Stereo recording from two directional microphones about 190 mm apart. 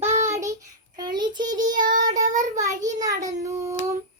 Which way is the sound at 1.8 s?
45° right (ahead or behind).